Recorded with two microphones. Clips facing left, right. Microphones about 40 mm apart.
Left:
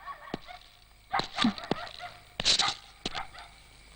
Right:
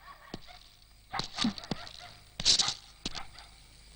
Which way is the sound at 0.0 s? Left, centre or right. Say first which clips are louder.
Left 7 dB; left.